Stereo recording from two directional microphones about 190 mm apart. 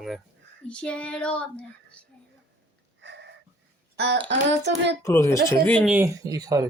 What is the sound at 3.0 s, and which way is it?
Wheeze, 65° right (ahead or behind).